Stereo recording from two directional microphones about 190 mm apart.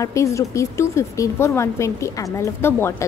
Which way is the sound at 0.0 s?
15° left (ahead or behind).